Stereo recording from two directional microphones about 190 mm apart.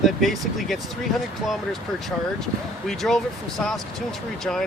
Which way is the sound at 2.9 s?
Centre (ahead or behind).